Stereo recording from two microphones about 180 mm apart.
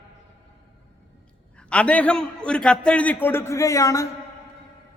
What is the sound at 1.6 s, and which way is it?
A man's voice, 5° left (ahead or behind).